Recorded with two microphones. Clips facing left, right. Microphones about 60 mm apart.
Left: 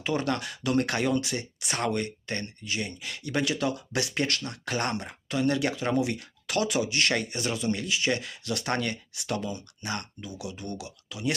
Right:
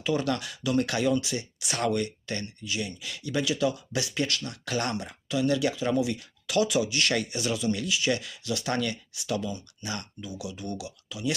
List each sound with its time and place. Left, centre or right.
0.0 s speech: left